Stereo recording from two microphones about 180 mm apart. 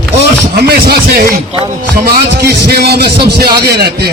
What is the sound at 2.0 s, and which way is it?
A man's voice, 65° right (ahead or behind).